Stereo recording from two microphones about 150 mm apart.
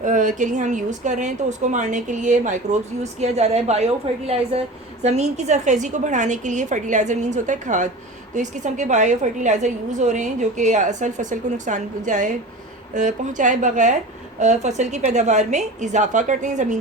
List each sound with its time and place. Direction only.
0.0 s a woman's voice: 55° right (ahead or behind)